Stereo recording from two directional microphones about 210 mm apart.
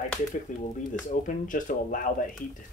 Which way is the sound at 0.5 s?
35° left (ahead or behind).